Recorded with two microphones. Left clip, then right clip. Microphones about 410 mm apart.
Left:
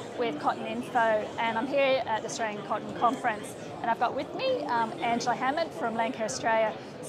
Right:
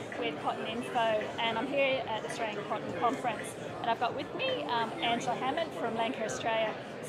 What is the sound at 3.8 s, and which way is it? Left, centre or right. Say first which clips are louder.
A woman's voice: left 4 dB; left.